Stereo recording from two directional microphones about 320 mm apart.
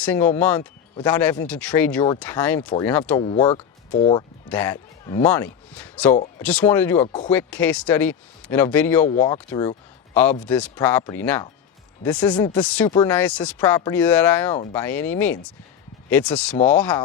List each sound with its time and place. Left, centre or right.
0.0 s speech: centre
7.0 s speech: centre
7.3 s speech: centre